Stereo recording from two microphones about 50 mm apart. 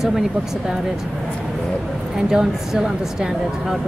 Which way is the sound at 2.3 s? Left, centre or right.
Centre.